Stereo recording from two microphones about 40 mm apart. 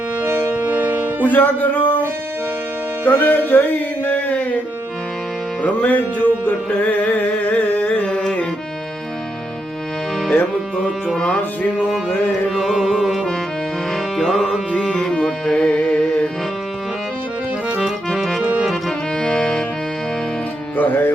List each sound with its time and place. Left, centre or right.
0.2 s music: right
1.3 s speech: left
3.1 s a sound: left
5.6 s music: left
12.5 s music: centre
15.0 s music: centre
15.7 s music: left
19.2 s music: centre
20.7 s music: left